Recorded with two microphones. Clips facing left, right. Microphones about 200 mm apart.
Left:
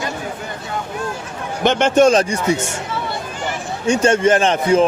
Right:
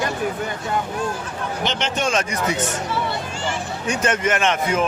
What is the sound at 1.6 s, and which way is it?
Speech, 50° left (ahead or behind).